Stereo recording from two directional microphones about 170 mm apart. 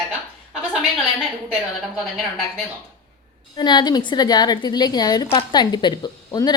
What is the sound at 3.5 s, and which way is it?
A woman's voice, 25° left (ahead or behind).